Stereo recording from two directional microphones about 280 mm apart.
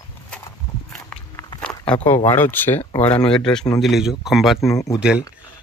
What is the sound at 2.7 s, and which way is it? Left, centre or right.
Speech, centre.